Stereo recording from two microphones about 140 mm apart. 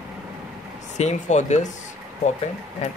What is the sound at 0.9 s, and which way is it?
Speech, 55° left (ahead or behind).